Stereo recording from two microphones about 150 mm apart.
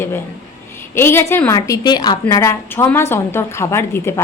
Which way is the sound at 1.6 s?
25° left (ahead or behind).